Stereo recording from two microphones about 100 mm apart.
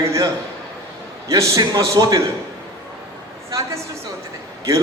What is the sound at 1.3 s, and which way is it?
Speech, 35° right (ahead or behind).